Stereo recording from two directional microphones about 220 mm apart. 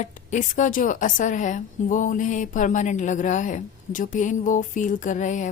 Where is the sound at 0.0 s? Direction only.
35° left (ahead or behind).